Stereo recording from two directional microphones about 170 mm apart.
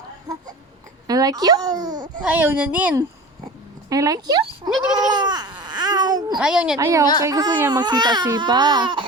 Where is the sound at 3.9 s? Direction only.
20° right (ahead or behind).